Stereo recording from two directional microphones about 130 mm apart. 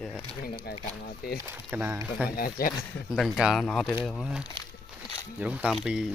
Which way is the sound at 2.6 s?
90° left.